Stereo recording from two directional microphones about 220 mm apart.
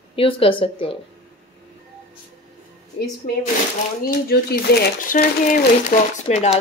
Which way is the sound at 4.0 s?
45° left (ahead or behind).